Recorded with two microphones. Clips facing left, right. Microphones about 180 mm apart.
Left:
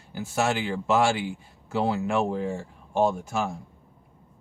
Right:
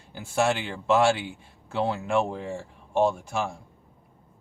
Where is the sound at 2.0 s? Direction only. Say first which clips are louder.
Left 1 dB; centre (ahead or behind).